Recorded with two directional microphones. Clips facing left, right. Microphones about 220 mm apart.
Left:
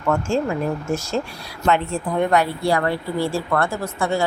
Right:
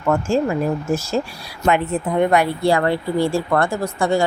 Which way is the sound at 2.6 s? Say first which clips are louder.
Right 3 dB; 25° right (ahead or behind).